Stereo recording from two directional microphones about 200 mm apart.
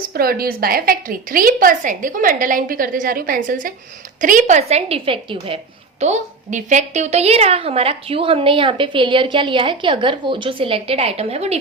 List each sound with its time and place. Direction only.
0.1 s a woman's voice: 50° right (ahead or behind); by 11.6 s 30° right (ahead or behind)